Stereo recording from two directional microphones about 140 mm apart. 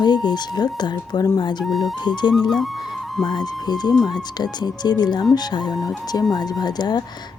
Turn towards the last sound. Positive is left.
turn(degrees=30)  # may be behind; listen again after turning